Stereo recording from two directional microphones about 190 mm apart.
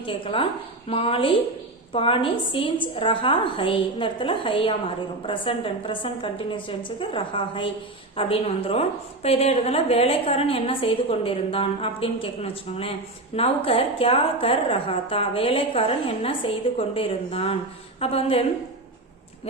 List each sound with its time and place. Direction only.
0.0 s a woman's voice: 25° left (ahead or behind)